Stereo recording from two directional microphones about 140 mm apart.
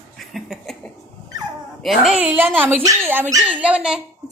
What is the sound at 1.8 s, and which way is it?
Speech, 5° right (ahead or behind).